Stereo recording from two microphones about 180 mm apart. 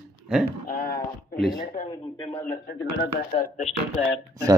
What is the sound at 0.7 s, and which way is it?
Speech, 50° left (ahead or behind).